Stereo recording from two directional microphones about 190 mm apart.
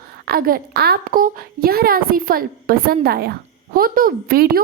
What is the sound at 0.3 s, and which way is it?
A woman's voice, 50° right (ahead or behind).